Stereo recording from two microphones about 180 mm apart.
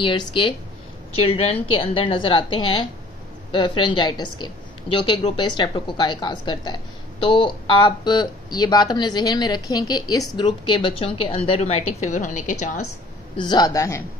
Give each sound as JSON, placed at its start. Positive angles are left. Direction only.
{"t": 0.0, "sound": "a woman's voice", "side_deg": 25}
{"t": 13.4, "sound": "a man's voice", "side_deg": 25}